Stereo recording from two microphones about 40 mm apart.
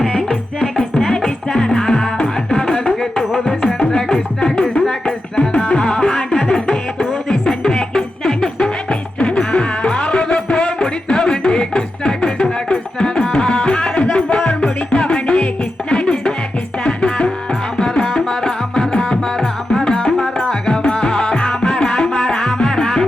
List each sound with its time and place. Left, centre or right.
0.3 s music: centre
17.7 s music: centre